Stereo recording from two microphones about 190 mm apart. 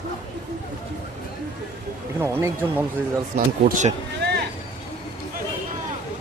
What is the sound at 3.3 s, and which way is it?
Speech, 40° right (ahead or behind).